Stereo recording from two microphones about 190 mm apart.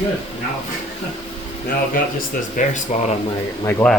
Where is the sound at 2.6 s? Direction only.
45° left (ahead or behind).